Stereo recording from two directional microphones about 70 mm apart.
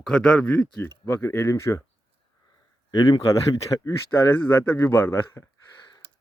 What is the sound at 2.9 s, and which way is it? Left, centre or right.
Speech, left.